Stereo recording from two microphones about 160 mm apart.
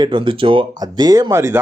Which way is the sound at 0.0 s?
30° right (ahead or behind).